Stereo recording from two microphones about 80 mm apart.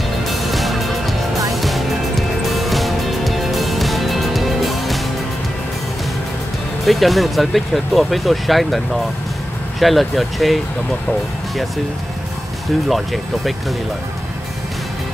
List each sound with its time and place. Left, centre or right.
0.3 s music: centre
6.9 s speech: centre
12.8 s speech: centre